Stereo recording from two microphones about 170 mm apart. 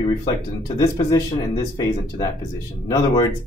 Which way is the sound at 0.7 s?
20° left (ahead or behind).